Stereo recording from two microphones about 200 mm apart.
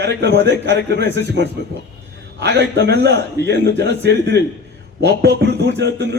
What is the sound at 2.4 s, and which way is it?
A man's voice, 60° right (ahead or behind).